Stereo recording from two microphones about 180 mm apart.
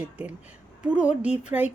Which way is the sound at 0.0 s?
10° right (ahead or behind).